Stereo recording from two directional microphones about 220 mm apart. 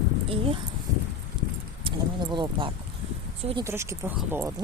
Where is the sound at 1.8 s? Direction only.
20° right (ahead or behind).